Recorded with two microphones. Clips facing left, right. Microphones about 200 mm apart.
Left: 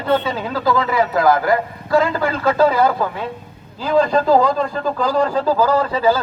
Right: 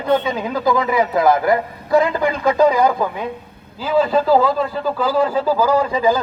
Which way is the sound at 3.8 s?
5° right (ahead or behind).